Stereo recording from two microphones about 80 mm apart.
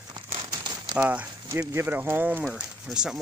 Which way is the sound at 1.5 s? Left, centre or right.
Right.